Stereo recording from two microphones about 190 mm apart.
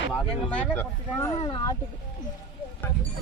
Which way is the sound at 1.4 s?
25° left (ahead or behind).